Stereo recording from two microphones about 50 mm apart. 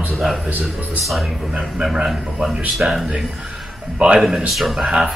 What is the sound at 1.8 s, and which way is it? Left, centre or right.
A man's voice, centre.